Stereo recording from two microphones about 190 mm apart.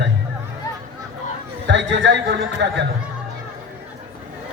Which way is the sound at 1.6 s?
70° right (ahead or behind).